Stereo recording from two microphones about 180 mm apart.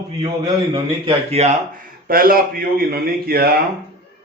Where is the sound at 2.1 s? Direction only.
55° right (ahead or behind).